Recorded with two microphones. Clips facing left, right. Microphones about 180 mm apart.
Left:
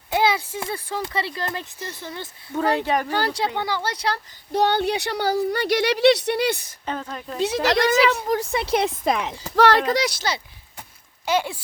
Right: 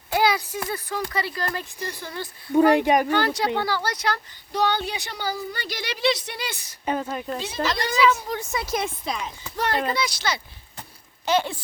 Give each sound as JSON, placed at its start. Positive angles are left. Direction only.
{"t": 0.1, "sound": "speech", "side_deg": 25}
{"t": 2.6, "sound": "a woman's voice", "side_deg": -15}
{"t": 3.1, "sound": "speech", "side_deg": 35}
{"t": 3.9, "sound": "speech", "side_deg": 30}
{"t": 4.5, "sound": "a woman's voice", "side_deg": 55}
{"t": 6.8, "sound": "a woman's voice", "side_deg": -10}
{"t": 7.4, "sound": "speech", "side_deg": 75}
{"t": 8.5, "sound": "speech", "side_deg": 30}
{"t": 9.0, "sound": "speech", "side_deg": 60}
{"t": 9.6, "sound": "speech", "side_deg": 85}
{"t": 11.3, "sound": "speech", "side_deg": 10}